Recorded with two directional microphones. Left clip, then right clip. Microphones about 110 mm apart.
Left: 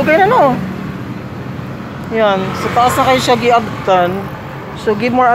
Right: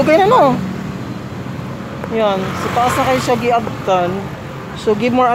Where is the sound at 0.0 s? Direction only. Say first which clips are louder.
Left 1 dB; 25° right (ahead or behind).